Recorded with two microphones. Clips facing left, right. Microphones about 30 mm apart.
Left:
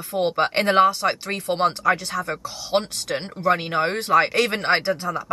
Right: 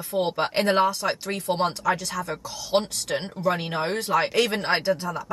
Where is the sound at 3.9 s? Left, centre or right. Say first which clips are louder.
Left 4 dB; left.